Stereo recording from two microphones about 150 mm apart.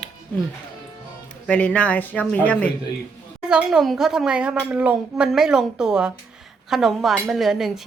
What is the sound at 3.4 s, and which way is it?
A woman's voice, 5° right (ahead or behind).